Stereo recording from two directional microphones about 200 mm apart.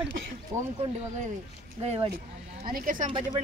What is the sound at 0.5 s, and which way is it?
Speech, 15° right (ahead or behind).